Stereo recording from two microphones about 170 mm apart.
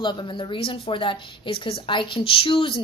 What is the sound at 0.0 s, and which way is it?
Speech, 25° left (ahead or behind).